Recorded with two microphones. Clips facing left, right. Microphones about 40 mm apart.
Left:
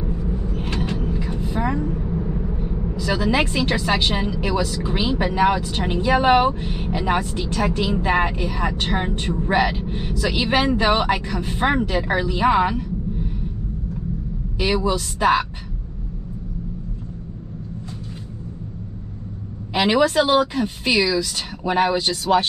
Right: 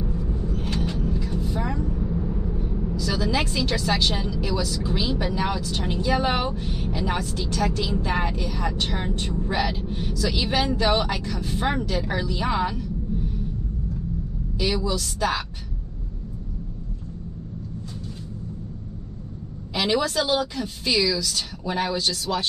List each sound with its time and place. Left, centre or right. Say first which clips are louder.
0.3 s a woman's voice: left 2 dB; left
14.6 s speech: left 4 dB; left
19.7 s speech: left 6 dB; left